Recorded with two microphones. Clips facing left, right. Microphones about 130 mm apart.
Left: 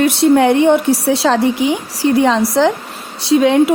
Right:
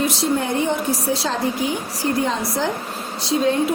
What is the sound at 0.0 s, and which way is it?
A woman's voice, 65° left (ahead or behind).